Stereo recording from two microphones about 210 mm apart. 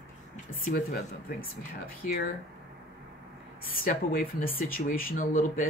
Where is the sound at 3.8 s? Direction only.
40° left (ahead or behind).